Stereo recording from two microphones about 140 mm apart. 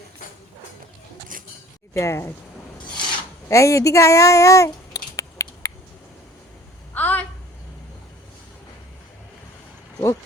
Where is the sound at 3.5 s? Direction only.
20° left (ahead or behind).